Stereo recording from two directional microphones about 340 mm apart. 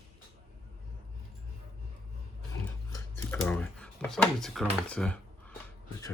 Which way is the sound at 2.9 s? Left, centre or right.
Centre.